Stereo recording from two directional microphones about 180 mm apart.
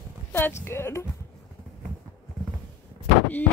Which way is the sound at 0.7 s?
15° left (ahead or behind).